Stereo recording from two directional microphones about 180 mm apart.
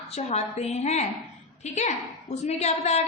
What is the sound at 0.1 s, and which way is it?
A woman's voice, 35° left (ahead or behind).